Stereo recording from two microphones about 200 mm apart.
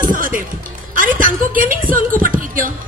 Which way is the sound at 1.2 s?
45° right (ahead or behind).